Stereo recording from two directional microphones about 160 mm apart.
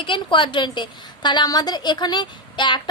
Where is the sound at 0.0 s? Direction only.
30° left (ahead or behind).